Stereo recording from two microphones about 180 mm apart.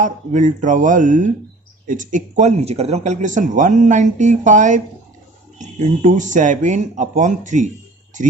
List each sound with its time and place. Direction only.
0.0 s speech: 45° right (ahead or behind)